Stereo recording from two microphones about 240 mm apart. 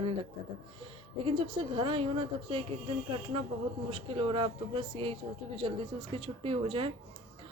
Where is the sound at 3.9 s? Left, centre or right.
Right.